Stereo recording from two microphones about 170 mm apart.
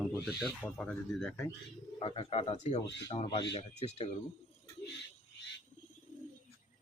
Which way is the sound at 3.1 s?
30° left (ahead or behind).